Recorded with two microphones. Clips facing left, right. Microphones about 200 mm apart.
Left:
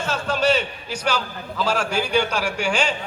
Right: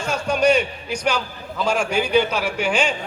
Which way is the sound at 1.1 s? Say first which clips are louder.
Even; 10° right (ahead or behind).